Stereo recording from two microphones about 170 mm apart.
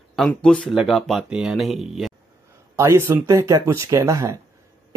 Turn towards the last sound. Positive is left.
turn(degrees=-20)  # may be behind; listen again after turning